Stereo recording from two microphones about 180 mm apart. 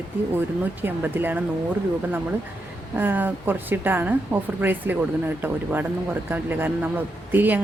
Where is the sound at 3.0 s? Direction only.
10° right (ahead or behind).